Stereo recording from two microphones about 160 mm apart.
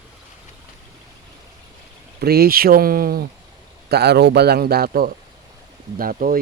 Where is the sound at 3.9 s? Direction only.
90° right.